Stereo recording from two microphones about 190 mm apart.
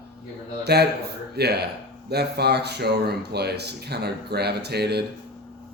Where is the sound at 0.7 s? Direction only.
60° right (ahead or behind).